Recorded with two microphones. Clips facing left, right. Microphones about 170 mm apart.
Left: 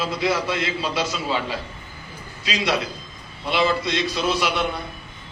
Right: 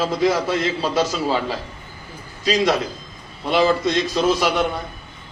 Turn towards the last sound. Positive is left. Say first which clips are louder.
# right 4 dB
turn(degrees=-40)  # may be behind; listen again after turning